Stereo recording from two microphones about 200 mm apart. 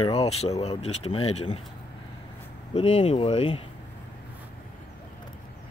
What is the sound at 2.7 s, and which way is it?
Speech, 30° left (ahead or behind).